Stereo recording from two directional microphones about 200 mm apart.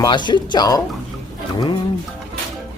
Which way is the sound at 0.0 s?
25° left (ahead or behind).